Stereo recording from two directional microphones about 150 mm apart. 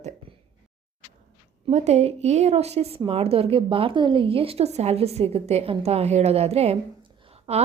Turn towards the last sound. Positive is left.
turn(degrees=-45)  # may be behind; listen again after turning